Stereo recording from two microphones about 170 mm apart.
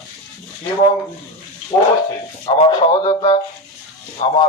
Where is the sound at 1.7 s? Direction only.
35° left (ahead or behind).